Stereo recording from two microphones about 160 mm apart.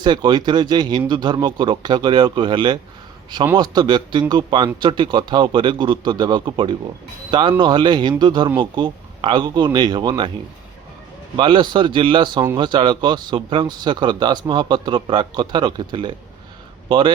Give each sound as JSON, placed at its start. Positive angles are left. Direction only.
{"t": 0.0, "sound": "speech", "side_deg": -30}
{"t": 11.3, "sound": "speech", "side_deg": -30}